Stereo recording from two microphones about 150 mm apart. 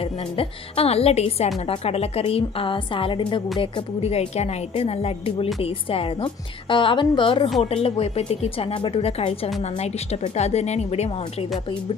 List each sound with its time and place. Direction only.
0.0 s a woman's voice: 40° left (ahead or behind)